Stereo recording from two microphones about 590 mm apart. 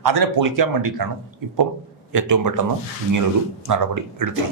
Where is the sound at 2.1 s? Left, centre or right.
Right.